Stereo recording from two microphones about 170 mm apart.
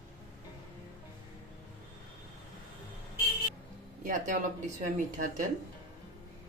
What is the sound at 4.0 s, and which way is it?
Speech, 50° right (ahead or behind).